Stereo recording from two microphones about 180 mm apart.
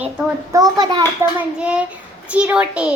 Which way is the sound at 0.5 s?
20° right (ahead or behind).